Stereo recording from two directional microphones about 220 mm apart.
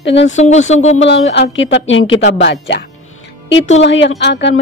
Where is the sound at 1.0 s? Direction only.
55° left (ahead or behind).